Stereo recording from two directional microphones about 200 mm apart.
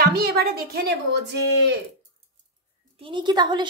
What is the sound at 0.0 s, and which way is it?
Speech, 50° right (ahead or behind).